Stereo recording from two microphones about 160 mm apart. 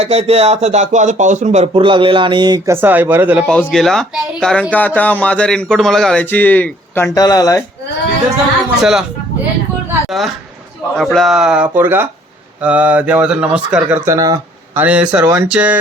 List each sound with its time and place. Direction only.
0.0 s speech: 40° right (ahead or behind); by 2.7 s 25° right (ahead or behind)
2.7 s speech: 10° right (ahead or behind)
3.4 s speech: 5° left (ahead or behind); by 7.6 s 20° left (ahead or behind)
8.8 s speech: 5° right (ahead or behind)
10.1 s speech: centre (ahead or behind)
14.0 s speech: 20° right (ahead or behind)
14.8 s speech: 10° right (ahead or behind)